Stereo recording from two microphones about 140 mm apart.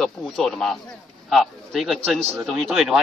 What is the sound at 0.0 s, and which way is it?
A man's voice, 5° left (ahead or behind).